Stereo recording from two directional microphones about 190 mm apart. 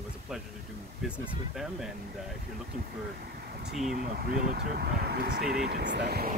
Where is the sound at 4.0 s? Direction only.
50° right (ahead or behind).